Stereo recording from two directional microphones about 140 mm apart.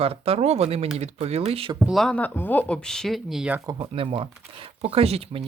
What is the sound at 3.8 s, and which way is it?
Speech, 40° right (ahead or behind).